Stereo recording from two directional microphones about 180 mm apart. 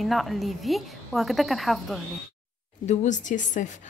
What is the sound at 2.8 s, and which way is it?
Speech, 45° left (ahead or behind).